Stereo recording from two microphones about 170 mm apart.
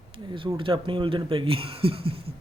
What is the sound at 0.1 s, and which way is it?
Speech, 30° right (ahead or behind).